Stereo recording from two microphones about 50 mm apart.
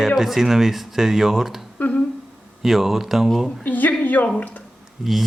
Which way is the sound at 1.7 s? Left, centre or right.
Left.